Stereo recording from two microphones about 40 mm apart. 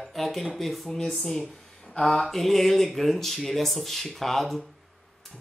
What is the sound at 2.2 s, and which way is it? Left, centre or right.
Speech, centre.